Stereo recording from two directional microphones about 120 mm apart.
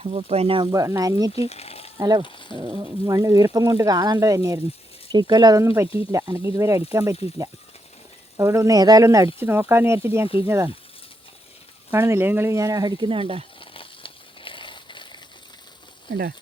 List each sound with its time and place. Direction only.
0.0 s speech: 60° right (ahead or behind)
0.7 s speech: 30° right (ahead or behind)
1.4 s speech: 60° left (ahead or behind)
2.0 s speech: 35° right (ahead or behind)
2.2 s speech: 40° left (ahead or behind)
3.1 s speech: 30° right (ahead or behind)
8.4 s speech: 25° right (ahead or behind)
11.9 s speech: 20° right (ahead or behind); by 13.4 s 50° right (ahead or behind)
13.6 s a sound: 45° left (ahead or behind)